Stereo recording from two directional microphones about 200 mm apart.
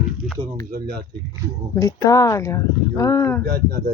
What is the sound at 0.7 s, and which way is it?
Speech, 50° right (ahead or behind).